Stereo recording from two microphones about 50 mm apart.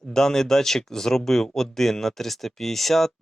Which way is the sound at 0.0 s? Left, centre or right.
Centre.